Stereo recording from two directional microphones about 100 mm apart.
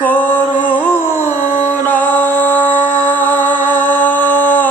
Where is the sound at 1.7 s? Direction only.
15° left (ahead or behind).